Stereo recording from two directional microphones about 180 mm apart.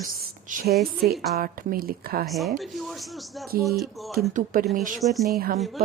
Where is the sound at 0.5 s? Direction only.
55° right (ahead or behind).